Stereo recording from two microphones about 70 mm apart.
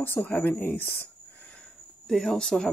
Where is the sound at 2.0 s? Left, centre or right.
Centre.